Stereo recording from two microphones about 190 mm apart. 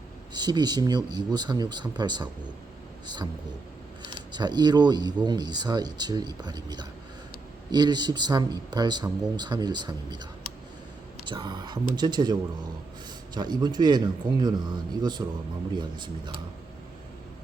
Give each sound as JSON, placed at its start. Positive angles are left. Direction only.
{"t": 0.3, "sound": "speech", "side_deg": -20}
{"t": 4.0, "sound": "speech", "side_deg": -20}
{"t": 11.3, "sound": "speech", "side_deg": -25}